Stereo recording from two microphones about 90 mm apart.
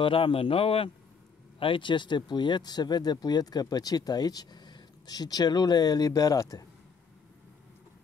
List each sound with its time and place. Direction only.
0.0 s a man's voice: 90° left
1.6 s speech: 65° left (ahead or behind); by 6.6 s 40° left (ahead or behind)